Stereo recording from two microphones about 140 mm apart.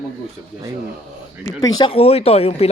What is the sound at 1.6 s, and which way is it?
Speech, 30° left (ahead or behind).